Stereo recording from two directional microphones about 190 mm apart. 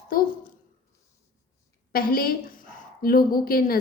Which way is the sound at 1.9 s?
50° left (ahead or behind).